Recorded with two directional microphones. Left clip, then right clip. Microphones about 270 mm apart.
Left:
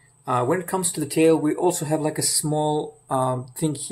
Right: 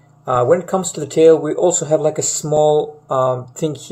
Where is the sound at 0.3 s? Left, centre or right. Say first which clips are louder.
Right 8 dB; left.